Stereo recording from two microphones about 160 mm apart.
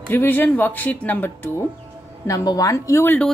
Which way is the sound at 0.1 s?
10° left (ahead or behind).